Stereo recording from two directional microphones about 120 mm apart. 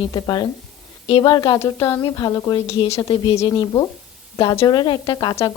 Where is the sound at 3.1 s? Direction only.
50° left (ahead or behind).